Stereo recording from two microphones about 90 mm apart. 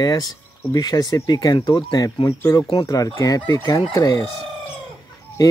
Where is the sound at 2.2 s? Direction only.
40° left (ahead or behind).